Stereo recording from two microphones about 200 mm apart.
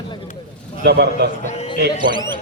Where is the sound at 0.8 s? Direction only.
55° right (ahead or behind).